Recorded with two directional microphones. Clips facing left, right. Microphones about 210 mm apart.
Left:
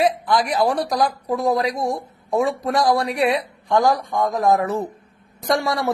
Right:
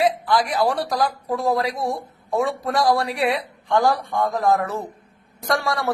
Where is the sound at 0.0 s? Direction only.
20° left (ahead or behind).